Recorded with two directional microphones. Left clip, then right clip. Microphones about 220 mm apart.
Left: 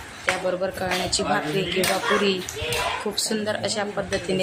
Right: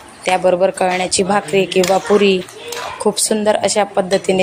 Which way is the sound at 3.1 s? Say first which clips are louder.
Right 10 dB; 30° right (ahead or behind).